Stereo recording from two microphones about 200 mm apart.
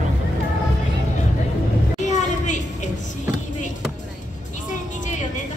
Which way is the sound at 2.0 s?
35° left (ahead or behind).